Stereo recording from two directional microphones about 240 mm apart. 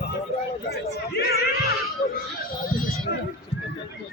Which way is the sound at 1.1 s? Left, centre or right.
Left.